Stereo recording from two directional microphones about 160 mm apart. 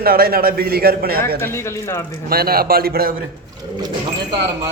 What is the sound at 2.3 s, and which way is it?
Speech, 70° right (ahead or behind).